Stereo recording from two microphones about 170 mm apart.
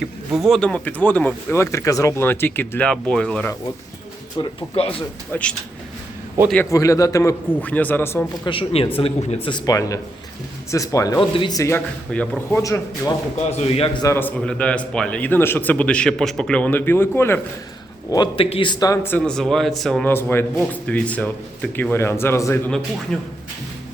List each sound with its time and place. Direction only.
0.3 s speech: centre (ahead or behind)
4.4 s a man's voice: 25° left (ahead or behind)
5.3 s speech: 5° left (ahead or behind)
8.4 s a man's voice: 30° left (ahead or behind)
13.5 s a man's voice: 35° left (ahead or behind)
14.0 s speech: 15° left (ahead or behind)
18.1 s speech: 25° left (ahead or behind)
23.1 s a man's voice: 5° left (ahead or behind)